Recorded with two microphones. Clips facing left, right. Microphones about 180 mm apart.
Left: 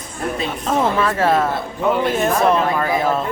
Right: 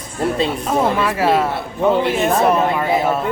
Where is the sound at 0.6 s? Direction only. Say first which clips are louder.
Left 2 dB; 10° right (ahead or behind).